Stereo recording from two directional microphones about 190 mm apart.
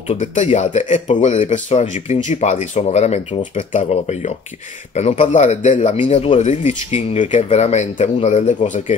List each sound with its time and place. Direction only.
0.1 s speech: 40° left (ahead or behind)